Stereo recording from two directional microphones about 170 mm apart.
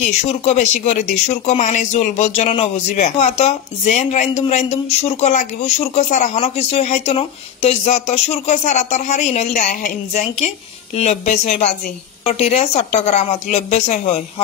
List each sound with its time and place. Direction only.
0.0 s speech: 40° left (ahead or behind)